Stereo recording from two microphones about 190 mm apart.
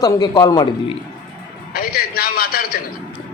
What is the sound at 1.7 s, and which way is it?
A man's voice, 50° left (ahead or behind).